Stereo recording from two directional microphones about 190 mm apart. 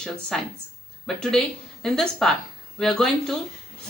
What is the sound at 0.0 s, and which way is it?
Speech, 5° left (ahead or behind).